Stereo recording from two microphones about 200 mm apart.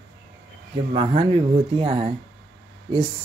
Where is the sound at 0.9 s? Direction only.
25° right (ahead or behind).